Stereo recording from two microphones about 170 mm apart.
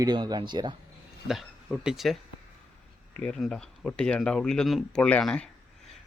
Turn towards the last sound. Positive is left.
turn(degrees=5)  # may be behind; listen again after turning